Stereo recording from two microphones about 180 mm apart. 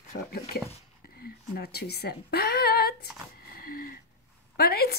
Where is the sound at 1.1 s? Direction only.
55° left (ahead or behind).